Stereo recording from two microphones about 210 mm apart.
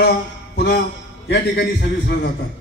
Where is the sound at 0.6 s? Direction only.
50° left (ahead or behind).